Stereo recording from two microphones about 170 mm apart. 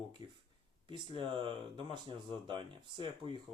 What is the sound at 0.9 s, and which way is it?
Speech, 30° right (ahead or behind).